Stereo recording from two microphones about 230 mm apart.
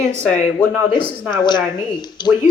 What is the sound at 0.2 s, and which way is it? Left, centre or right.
Speech, centre.